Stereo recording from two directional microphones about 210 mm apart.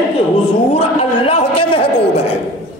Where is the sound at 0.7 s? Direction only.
25° left (ahead or behind).